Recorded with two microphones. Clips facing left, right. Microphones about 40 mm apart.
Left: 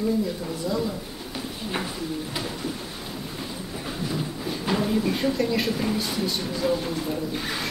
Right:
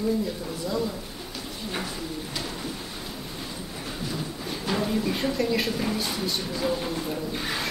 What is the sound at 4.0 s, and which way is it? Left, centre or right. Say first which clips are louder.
Speech: left 4 dB; centre.